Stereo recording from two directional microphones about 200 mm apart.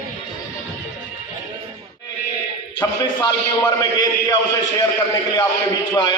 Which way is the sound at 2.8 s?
15° left (ahead or behind).